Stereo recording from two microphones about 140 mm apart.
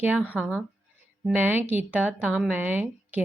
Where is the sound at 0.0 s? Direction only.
10° right (ahead or behind).